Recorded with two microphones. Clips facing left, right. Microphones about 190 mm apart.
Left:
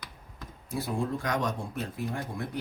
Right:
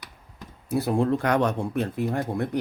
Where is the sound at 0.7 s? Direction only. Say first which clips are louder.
Right 8 dB; 65° right (ahead or behind).